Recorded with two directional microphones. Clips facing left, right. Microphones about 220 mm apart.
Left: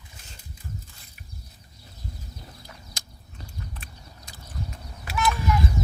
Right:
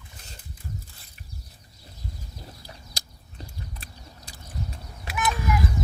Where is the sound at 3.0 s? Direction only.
35° right (ahead or behind).